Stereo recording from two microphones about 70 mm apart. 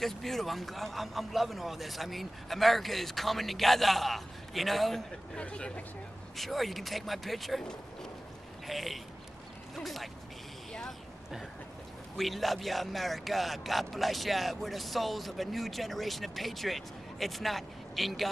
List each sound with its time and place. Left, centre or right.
0.0 s speech: centre
5.4 s speech: centre
6.3 s speech: centre
10.7 s vehicle: centre
12.2 s speech: centre